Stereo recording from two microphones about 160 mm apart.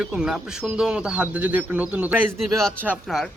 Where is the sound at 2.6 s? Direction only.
5° left (ahead or behind).